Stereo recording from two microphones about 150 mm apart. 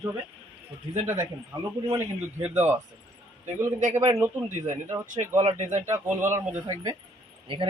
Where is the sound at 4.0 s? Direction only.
20° right (ahead or behind).